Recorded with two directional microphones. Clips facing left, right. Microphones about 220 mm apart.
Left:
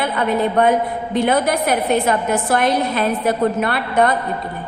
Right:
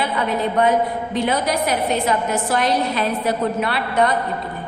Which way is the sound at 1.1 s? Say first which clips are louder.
Left 4 dB; 55° left (ahead or behind).